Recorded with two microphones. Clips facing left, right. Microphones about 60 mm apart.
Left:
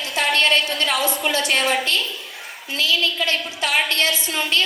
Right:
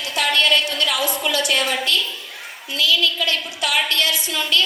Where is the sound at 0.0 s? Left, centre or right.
Left.